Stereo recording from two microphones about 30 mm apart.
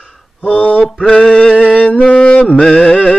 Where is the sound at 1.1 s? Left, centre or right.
Left.